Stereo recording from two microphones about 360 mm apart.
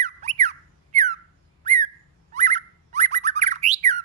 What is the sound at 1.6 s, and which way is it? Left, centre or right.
Squawk, centre.